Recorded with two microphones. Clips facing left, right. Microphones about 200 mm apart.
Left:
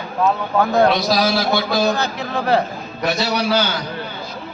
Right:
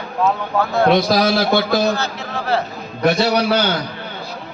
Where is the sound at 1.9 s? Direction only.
15° left (ahead or behind).